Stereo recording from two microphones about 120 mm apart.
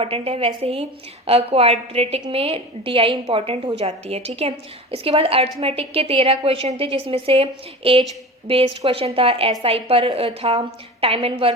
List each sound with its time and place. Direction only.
0.0 s a woman's voice: 55° right (ahead or behind)